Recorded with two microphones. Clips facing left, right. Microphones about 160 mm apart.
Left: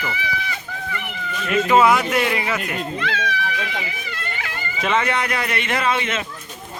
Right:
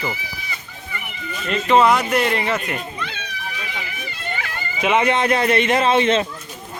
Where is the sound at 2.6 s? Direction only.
90° left.